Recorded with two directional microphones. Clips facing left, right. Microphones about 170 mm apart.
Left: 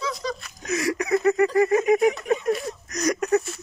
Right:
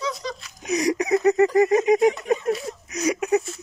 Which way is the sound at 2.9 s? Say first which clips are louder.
Even; 10° right (ahead or behind).